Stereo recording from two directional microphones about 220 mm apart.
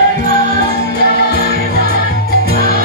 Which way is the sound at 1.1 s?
45° left (ahead or behind).